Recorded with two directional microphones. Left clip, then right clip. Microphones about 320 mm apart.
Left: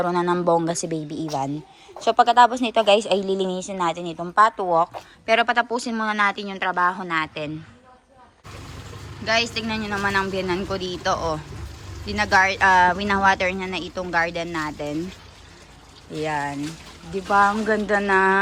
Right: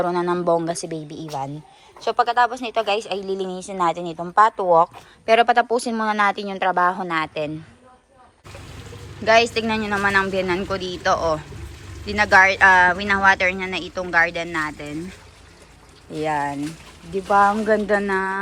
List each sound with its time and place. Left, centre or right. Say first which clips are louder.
0.0 s speech: even; centre
9.2 s speech: right 6 dB; centre
16.1 s speech: right 3 dB; centre